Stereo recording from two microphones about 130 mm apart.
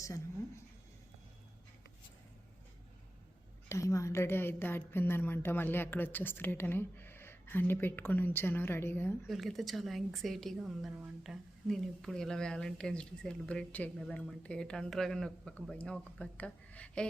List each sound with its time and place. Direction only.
0.0 s a sound: 25° left (ahead or behind)
3.7 s a woman's voice: 25° left (ahead or behind)
9.2 s a woman's voice: centre (ahead or behind)